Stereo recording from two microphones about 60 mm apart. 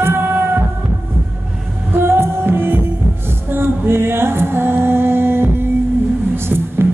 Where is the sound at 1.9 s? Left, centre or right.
Right.